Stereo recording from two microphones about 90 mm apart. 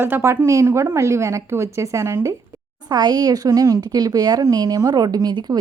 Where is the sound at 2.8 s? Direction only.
50° right (ahead or behind).